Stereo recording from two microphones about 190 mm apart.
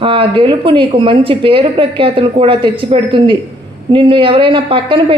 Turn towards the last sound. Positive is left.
turn(degrees=-25)  # may be behind; listen again after turning